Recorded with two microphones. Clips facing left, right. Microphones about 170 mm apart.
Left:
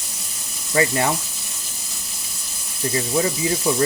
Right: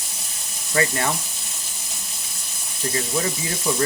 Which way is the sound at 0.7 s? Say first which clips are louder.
Left 3 dB; 20° left (ahead or behind).